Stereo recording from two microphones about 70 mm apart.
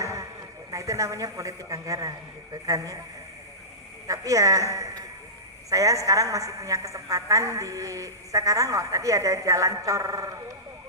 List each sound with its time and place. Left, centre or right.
0.0 s a sound: right
0.7 s a woman's voice: right
4.0 s a woman's voice: right